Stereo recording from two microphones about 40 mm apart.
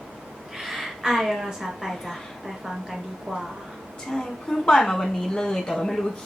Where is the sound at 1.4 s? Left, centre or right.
Centre.